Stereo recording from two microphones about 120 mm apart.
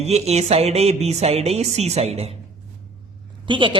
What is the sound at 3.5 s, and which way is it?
Speech, 45° right (ahead or behind).